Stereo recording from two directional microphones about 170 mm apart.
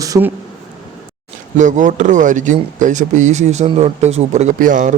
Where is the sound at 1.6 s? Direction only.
45° right (ahead or behind).